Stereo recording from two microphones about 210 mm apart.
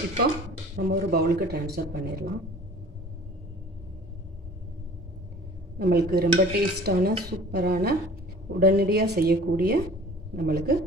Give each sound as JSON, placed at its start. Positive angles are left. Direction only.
{"t": 0.7, "sound": "a man's voice", "side_deg": -50}
{"t": 5.8, "sound": "a man's voice", "side_deg": -50}